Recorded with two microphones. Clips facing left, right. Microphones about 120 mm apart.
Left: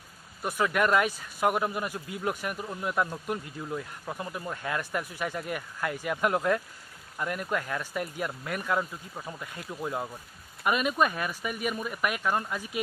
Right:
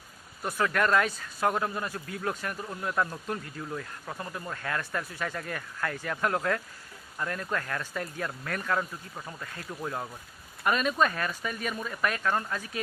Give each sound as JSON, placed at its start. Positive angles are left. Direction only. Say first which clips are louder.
{"t": 0.4, "sound": "speech", "louder": "left 1 dB", "side_deg": 15}